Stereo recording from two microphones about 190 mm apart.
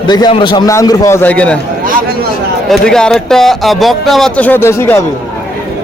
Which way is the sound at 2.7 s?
5° left (ahead or behind).